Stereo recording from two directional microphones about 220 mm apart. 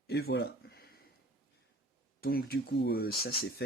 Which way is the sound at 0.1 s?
45° left (ahead or behind).